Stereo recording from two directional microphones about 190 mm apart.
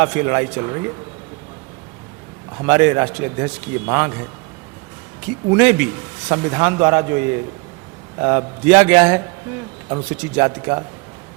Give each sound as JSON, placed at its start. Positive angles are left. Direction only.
{"t": 0.0, "sound": "a man's voice", "side_deg": -15}
{"t": 2.6, "sound": "a man's voice", "side_deg": -10}
{"t": 5.5, "sound": "a man's voice", "side_deg": -10}